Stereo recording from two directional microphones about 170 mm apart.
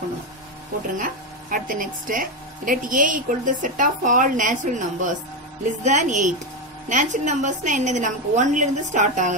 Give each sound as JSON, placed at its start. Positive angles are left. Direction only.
{"t": 0.9, "sound": "speech", "side_deg": -55}